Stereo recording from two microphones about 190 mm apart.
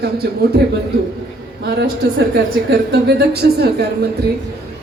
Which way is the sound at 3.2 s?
55° right (ahead or behind).